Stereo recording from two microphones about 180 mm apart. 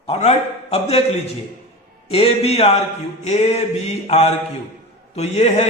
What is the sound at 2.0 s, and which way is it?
Mantra, 35° left (ahead or behind).